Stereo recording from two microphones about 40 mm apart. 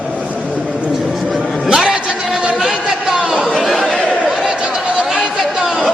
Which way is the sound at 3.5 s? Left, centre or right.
Centre.